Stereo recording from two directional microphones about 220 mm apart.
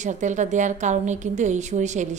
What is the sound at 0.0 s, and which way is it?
A woman's voice, 35° right (ahead or behind).